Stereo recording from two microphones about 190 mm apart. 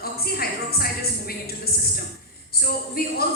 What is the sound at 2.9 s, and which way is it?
Music, 50° left (ahead or behind).